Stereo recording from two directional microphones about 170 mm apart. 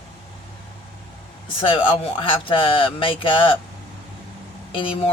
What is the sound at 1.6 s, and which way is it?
Speech, 30° left (ahead or behind).